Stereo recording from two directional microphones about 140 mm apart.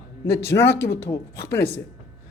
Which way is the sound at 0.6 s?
20° left (ahead or behind).